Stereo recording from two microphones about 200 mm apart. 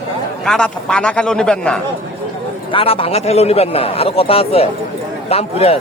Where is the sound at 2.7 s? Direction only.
25° left (ahead or behind).